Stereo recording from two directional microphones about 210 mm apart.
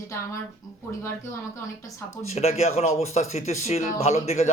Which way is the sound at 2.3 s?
30° left (ahead or behind).